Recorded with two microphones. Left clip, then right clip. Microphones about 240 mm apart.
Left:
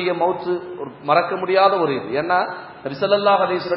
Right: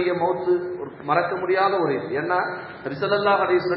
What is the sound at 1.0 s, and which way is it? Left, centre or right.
A man's voice, left.